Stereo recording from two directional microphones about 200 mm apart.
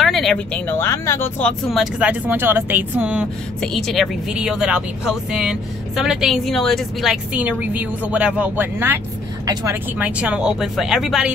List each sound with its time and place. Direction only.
0.0 s speech: centre (ahead or behind)
1.7 s speech: 5° right (ahead or behind)